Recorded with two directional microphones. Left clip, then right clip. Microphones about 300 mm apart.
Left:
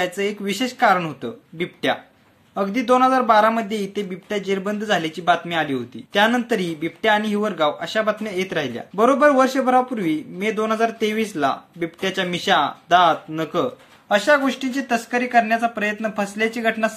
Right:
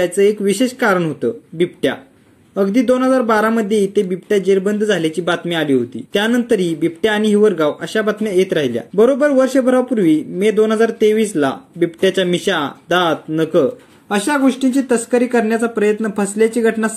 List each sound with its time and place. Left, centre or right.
0.0 s speech: centre
3.2 s speech: centre
11.1 s speech: left
11.3 s speech: centre